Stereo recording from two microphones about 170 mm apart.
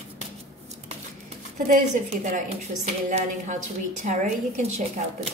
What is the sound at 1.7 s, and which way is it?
A woman's voice, 45° right (ahead or behind).